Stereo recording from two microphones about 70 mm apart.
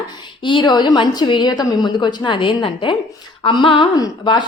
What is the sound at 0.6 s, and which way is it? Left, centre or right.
A woman's voice, left.